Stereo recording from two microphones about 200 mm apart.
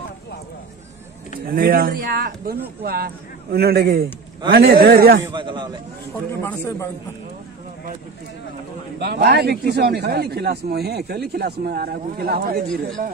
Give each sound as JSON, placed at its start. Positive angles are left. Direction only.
{"t": 1.5, "sound": "a man's voice", "side_deg": -45}
{"t": 5.3, "sound": "a man's voice", "side_deg": -25}
{"t": 6.4, "sound": "speech", "side_deg": 10}
{"t": 9.0, "sound": "a man's voice", "side_deg": -55}